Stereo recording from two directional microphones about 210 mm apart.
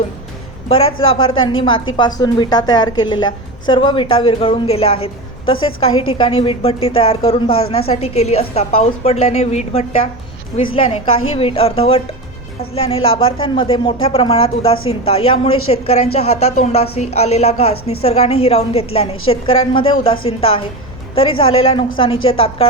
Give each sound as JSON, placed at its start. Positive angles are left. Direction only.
{"t": 1.0, "sound": "a woman's voice", "side_deg": 25}